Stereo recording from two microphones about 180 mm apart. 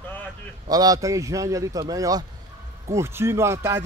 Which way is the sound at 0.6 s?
20° right (ahead or behind).